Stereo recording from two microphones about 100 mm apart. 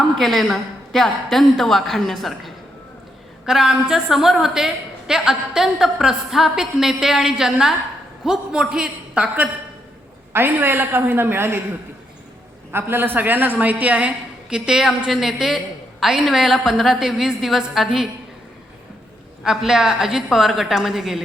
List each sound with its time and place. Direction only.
0.2 s a woman's voice: centre (ahead or behind); by 11.6 s 25° right (ahead or behind)
12.7 s a woman's voice: 20° right (ahead or behind); by 18.1 s 5° right (ahead or behind)
19.5 s a woman's voice: 5° right (ahead or behind)